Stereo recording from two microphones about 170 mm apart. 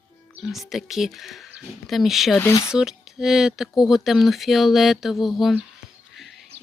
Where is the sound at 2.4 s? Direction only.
15° left (ahead or behind).